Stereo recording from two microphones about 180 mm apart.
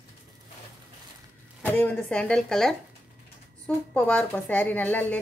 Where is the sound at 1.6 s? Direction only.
10° left (ahead or behind).